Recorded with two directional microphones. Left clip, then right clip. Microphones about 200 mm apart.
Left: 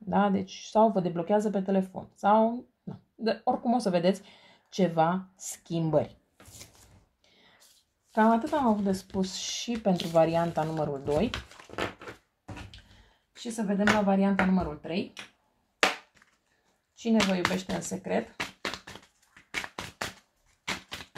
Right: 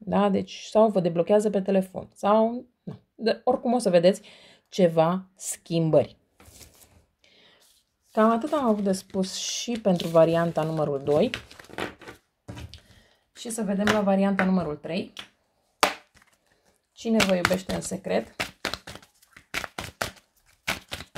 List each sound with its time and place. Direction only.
0.1 s speech: 35° right (ahead or behind)
8.1 s speech: 40° right (ahead or behind)
11.2 s speech: 20° right (ahead or behind)
13.3 s speech: 45° right (ahead or behind)
16.9 s a sound: 35° right (ahead or behind)
17.2 s speech: 50° right (ahead or behind)
18.4 s a sound: 50° right (ahead or behind)